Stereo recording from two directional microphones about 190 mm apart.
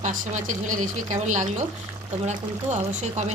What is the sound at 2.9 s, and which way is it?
Speech, 40° right (ahead or behind).